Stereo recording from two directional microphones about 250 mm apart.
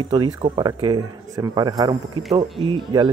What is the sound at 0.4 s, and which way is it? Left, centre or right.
A man's voice, centre.